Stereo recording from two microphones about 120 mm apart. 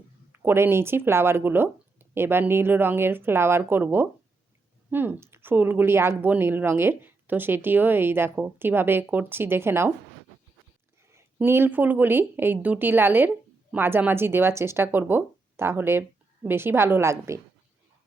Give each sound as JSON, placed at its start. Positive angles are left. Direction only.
{"t": 0.3, "sound": "speech", "side_deg": -20}
{"t": 11.1, "sound": "speech", "side_deg": -20}